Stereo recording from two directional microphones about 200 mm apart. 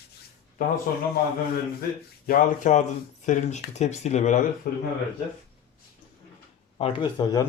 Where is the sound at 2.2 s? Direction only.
40° left (ahead or behind).